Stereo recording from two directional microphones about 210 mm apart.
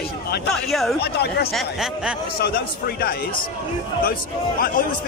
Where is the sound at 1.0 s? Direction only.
50° left (ahead or behind).